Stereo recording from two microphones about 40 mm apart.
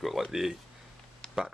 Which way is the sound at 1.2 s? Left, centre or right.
Left.